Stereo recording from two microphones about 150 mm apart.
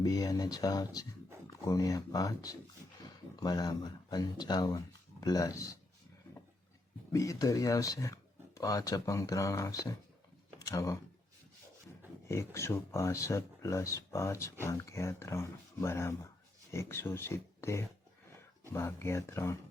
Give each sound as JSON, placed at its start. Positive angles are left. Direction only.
{"t": 0.0, "sound": "speech", "side_deg": 25}
{"t": 7.1, "sound": "speech", "side_deg": 20}
{"t": 12.3, "sound": "speech", "side_deg": 20}